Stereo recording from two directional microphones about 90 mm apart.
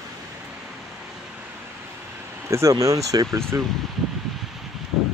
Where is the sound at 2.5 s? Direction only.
35° right (ahead or behind).